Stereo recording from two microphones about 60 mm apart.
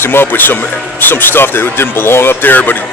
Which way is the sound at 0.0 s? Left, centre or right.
Left.